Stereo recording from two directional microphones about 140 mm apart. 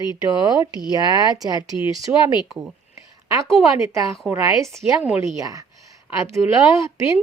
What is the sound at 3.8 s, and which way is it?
A woman's voice, 20° right (ahead or behind).